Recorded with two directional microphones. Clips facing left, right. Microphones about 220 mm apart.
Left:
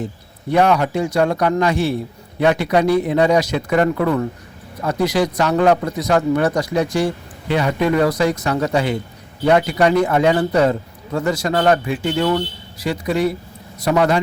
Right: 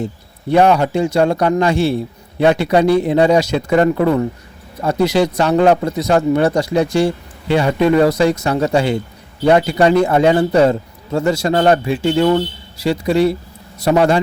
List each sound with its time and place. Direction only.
0.5 s a man's voice: 30° right (ahead or behind)